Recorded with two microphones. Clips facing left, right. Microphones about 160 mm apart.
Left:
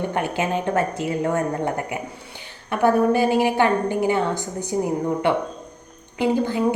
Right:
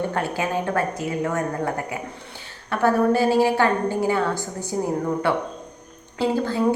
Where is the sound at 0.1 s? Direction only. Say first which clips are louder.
Left 1 dB; 20° left (ahead or behind).